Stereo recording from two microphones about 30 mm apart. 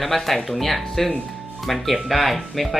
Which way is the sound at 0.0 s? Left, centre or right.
Centre.